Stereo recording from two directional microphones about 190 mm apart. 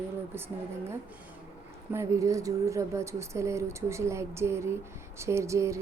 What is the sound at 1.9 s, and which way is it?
A woman's voice, 15° right (ahead or behind).